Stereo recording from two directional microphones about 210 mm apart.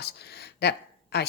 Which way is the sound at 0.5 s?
50° left (ahead or behind).